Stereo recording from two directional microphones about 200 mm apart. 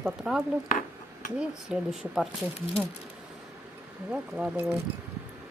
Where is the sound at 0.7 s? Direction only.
45° left (ahead or behind).